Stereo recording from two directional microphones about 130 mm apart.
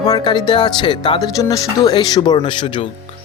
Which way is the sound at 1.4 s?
30° left (ahead or behind).